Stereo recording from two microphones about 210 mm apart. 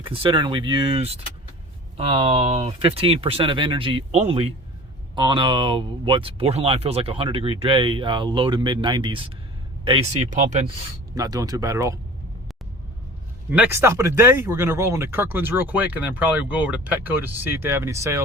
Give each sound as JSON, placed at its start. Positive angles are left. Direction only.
{"t": 0.0, "sound": "speech", "side_deg": -25}
{"t": 11.1, "sound": "speech", "side_deg": -15}
{"t": 13.5, "sound": "speech", "side_deg": -10}